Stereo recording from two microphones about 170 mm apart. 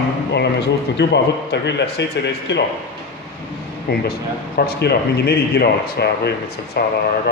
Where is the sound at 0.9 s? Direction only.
90° left.